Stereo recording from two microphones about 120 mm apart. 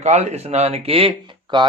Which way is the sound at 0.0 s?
70° right (ahead or behind).